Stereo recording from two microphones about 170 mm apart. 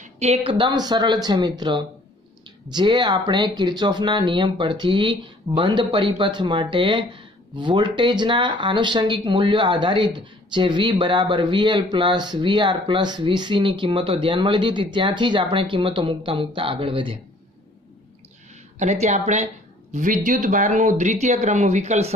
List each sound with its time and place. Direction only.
0.0 s speech: 40° right (ahead or behind)
18.8 s a woman's voice: 40° right (ahead or behind)